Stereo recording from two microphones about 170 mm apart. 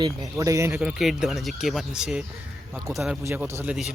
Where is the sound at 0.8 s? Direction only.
Centre (ahead or behind).